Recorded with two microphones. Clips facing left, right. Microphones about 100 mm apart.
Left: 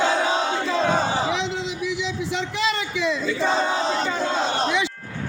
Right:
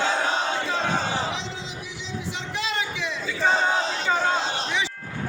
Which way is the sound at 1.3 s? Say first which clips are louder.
Left 7 dB; 70° left (ahead or behind).